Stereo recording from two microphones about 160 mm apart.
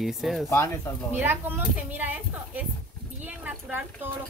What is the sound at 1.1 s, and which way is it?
Speech, 10° right (ahead or behind).